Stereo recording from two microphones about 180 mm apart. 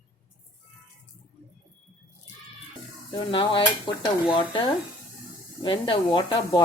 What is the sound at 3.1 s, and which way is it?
Speech, 30° left (ahead or behind).